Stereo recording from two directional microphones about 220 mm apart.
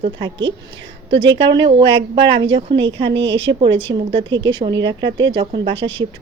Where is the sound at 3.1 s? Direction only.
55° right (ahead or behind).